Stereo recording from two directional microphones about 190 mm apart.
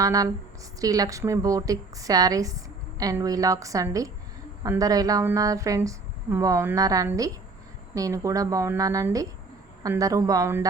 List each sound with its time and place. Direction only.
0.0 s a woman's voice: 20° right (ahead or behind)